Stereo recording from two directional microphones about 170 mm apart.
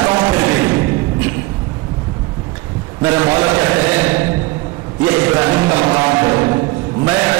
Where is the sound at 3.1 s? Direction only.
20° right (ahead or behind).